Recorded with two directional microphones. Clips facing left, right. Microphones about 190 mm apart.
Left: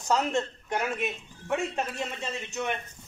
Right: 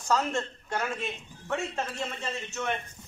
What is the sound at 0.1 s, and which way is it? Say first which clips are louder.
Speech: left 2 dB; 20° left (ahead or behind).